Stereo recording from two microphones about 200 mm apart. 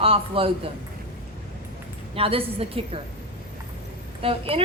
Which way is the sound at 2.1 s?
30° right (ahead or behind).